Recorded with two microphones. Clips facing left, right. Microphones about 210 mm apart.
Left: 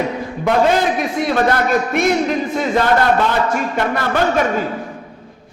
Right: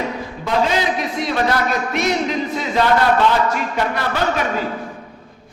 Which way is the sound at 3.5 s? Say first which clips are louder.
Left 3 dB; 50° left (ahead or behind).